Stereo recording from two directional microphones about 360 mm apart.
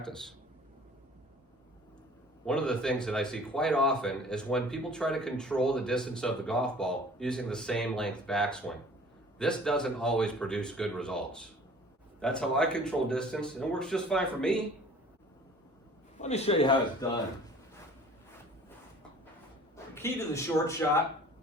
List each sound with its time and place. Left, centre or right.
0.0 s a man's voice: centre
2.5 s a man's voice: centre
16.1 s a man's voice: centre
19.7 s a man's voice: centre